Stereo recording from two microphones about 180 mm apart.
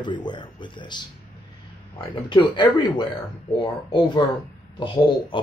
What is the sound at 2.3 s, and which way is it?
Speech, 25° left (ahead or behind).